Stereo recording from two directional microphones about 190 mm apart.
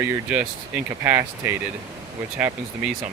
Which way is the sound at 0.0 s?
10° right (ahead or behind).